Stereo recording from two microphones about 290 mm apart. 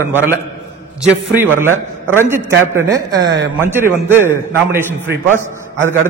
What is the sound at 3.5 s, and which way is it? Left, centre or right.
A man's voice, centre.